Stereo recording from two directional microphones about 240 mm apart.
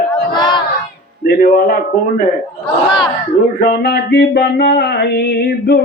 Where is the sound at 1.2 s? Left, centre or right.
Left.